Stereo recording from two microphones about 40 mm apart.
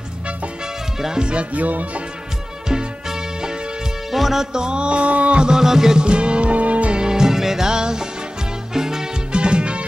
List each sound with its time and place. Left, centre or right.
1.0 s music: centre
1.3 s music: right
2.7 s music: centre
4.1 s music: centre
4.5 s a sound: centre; by 5.4 s right
5.4 s music: centre
6.0 s music: right
7.0 s music: centre
9.3 s music: right